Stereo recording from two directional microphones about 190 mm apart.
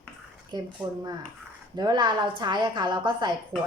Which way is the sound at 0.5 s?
25° right (ahead or behind).